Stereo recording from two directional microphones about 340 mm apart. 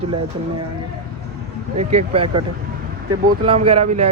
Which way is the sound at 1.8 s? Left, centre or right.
Centre.